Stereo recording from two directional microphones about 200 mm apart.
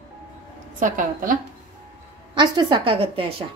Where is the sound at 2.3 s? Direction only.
25° right (ahead or behind).